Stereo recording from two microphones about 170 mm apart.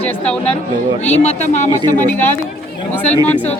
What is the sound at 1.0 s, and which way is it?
Speech, 40° left (ahead or behind).